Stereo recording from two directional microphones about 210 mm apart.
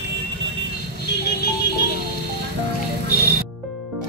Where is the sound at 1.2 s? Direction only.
50° left (ahead or behind).